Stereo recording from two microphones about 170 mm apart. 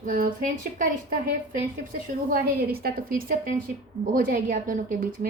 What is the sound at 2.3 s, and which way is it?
A woman's voice, 60° right (ahead or behind).